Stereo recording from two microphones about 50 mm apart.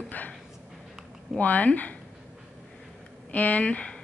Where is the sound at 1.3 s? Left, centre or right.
Left.